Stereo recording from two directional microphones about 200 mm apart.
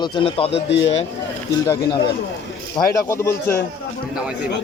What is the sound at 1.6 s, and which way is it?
Speech, 20° left (ahead or behind).